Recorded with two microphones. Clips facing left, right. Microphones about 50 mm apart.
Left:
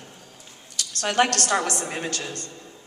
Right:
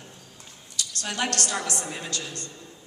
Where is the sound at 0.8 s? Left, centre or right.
Left.